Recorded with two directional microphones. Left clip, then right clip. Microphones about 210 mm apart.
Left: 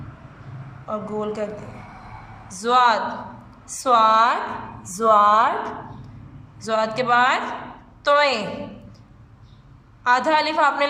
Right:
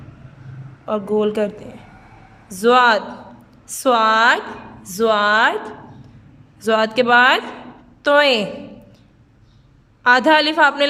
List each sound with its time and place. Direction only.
0.9 s a woman's voice: 65° right (ahead or behind)
2.5 s a woman's voice: 65° right (ahead or behind)
6.6 s a woman's voice: 65° right (ahead or behind)
10.0 s a woman's voice: 60° right (ahead or behind)